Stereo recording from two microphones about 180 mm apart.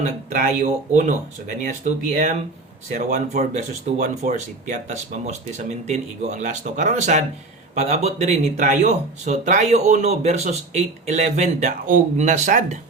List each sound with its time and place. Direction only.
0.0 s speech: 40° right (ahead or behind)
2.9 s speech: 45° right (ahead or behind)